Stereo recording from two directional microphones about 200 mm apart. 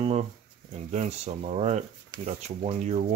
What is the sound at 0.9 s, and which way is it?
Speech, 35° right (ahead or behind).